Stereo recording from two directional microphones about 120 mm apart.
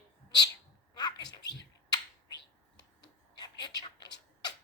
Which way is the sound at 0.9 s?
35° left (ahead or behind).